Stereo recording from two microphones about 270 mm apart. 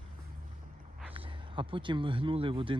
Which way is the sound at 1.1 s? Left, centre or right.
Centre.